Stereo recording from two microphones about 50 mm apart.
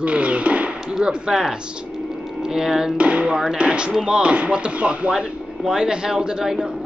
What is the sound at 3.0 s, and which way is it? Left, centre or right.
Speech, right.